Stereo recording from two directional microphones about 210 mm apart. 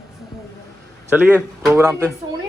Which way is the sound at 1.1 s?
5° right (ahead or behind).